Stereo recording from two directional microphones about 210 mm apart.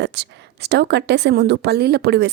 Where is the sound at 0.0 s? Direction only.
55° right (ahead or behind).